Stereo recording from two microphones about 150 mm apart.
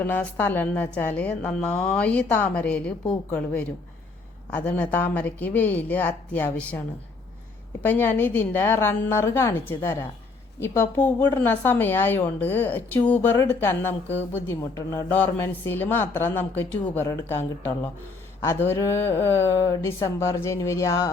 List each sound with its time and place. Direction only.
0.0 s speech: 10° left (ahead or behind)